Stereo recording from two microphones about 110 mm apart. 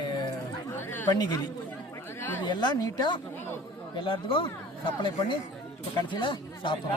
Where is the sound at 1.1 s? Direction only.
35° left (ahead or behind).